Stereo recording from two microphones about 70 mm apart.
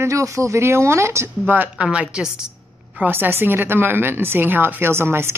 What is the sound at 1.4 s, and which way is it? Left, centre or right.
Speech, right.